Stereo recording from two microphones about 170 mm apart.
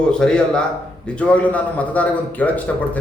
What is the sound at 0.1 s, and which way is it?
A man's voice, 5° left (ahead or behind).